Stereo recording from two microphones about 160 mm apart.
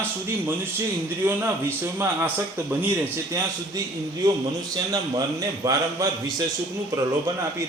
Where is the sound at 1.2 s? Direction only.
15° right (ahead or behind).